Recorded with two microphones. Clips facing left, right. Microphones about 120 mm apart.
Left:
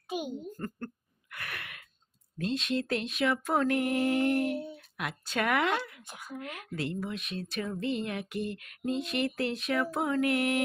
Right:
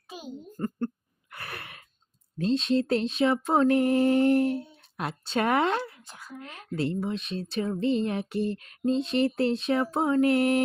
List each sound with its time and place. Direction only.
0.5 s a child's voice: 20° right (ahead or behind)
1.3 s gasp: 30° right (ahead or behind)
2.4 s mantra: 30° right (ahead or behind)
6.1 s a woman's voice: 15° left (ahead or behind)
6.4 s speech: 30° right (ahead or behind)